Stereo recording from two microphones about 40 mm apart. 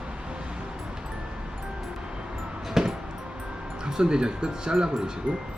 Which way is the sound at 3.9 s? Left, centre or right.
Centre.